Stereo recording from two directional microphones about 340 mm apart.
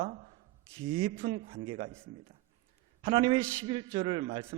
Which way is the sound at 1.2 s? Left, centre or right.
Right.